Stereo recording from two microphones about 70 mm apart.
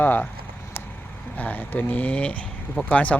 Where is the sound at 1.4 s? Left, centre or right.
Left.